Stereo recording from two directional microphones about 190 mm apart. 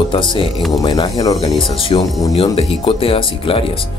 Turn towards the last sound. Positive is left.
turn(degrees=30)  # may be behind; listen again after turning